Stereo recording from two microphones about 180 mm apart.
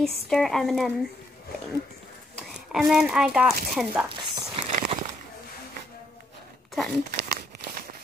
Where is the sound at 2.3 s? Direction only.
Centre (ahead or behind).